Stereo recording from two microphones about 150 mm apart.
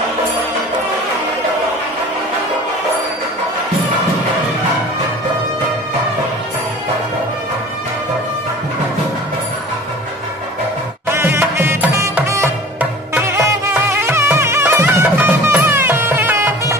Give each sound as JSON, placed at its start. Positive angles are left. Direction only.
{"t": 11.1, "sound": "music", "side_deg": -15}